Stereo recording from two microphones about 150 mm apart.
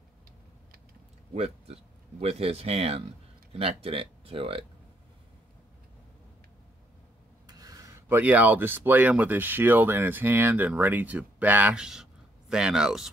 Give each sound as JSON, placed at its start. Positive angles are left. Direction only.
{"t": 1.3, "sound": "speech", "side_deg": -45}
{"t": 7.4, "sound": "speech", "side_deg": -25}